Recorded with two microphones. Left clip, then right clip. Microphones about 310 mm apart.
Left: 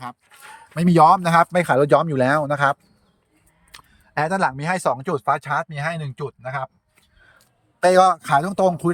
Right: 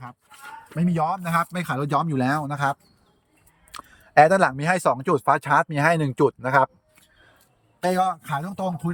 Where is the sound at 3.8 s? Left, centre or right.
Centre.